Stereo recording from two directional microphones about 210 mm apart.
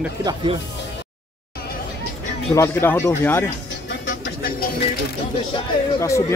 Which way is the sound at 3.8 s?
55° left (ahead or behind).